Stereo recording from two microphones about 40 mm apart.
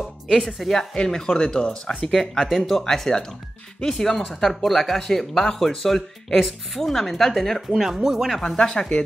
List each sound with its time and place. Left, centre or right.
0.3 s speech: centre
0.6 s speech: centre
2.3 s speech: centre
7.8 s speech: centre
8.3 s speech: centre
8.5 s speech: centre